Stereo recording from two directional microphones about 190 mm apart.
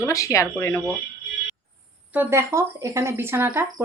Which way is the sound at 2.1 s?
15° right (ahead or behind).